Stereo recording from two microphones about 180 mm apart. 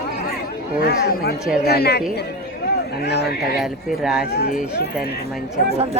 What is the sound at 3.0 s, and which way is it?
Speech, 65° left (ahead or behind).